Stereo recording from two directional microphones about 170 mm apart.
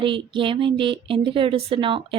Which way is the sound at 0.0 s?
30° right (ahead or behind).